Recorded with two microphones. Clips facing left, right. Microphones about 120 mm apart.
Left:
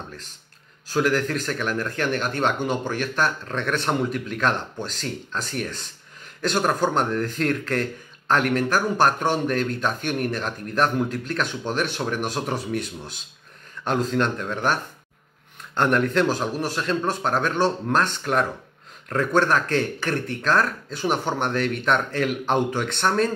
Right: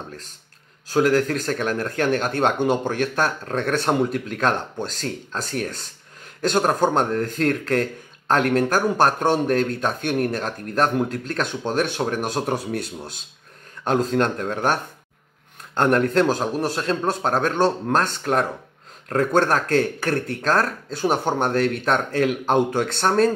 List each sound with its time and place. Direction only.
0.9 s speech: 40° right (ahead or behind)
13.8 s speech: 40° right (ahead or behind)